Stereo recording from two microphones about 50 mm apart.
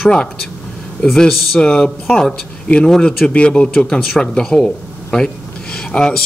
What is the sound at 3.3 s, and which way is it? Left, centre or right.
Speech, left.